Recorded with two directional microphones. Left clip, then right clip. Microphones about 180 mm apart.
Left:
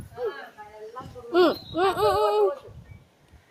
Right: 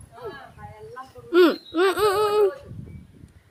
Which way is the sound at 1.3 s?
45° right (ahead or behind).